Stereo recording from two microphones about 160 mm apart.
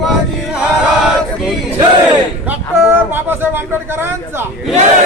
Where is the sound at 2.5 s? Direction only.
10° right (ahead or behind).